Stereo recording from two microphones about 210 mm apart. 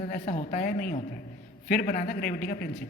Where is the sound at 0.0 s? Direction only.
35° left (ahead or behind).